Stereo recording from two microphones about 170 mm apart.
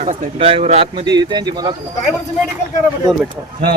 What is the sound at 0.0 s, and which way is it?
A man's voice, 40° right (ahead or behind).